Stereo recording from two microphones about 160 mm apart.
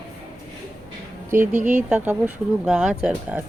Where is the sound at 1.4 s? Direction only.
50° right (ahead or behind).